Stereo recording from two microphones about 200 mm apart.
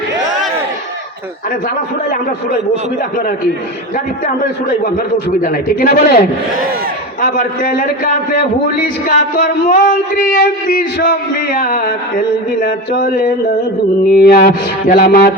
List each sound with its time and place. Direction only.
5.1 s a man's voice: 45° left (ahead or behind)
7.2 s a man's voice: 45° left (ahead or behind)